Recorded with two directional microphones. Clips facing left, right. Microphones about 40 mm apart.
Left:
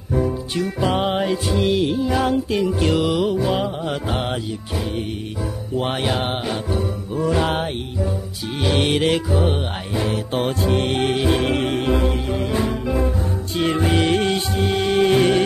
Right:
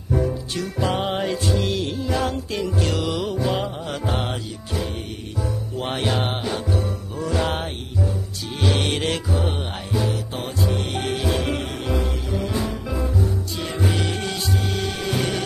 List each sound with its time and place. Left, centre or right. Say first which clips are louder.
0.6 s music: left 4 dB; centre
5.8 s music: left 3 dB; centre
9.9 s music: left 3 dB; left